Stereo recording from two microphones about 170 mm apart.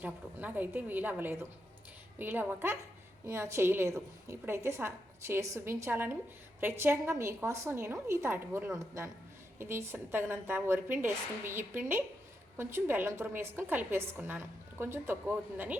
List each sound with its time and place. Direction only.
0.0 s a woman's voice: 10° right (ahead or behind)